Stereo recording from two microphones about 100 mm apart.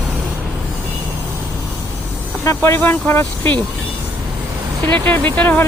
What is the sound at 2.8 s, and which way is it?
Speech, 20° left (ahead or behind).